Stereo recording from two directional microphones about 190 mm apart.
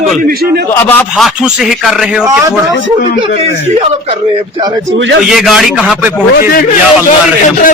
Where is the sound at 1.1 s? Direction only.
5° right (ahead or behind).